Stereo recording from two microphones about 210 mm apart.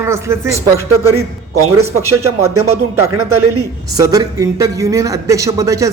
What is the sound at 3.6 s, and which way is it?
A man's voice, 15° right (ahead or behind).